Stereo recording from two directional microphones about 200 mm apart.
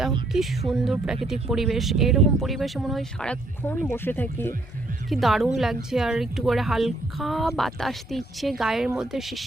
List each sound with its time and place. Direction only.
0.3 s speech: centre (ahead or behind)